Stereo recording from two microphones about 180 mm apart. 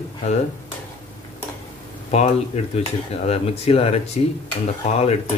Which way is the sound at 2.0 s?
40° left (ahead or behind).